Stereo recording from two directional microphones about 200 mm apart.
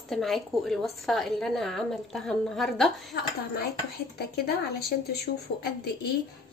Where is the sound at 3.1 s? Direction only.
50° left (ahead or behind).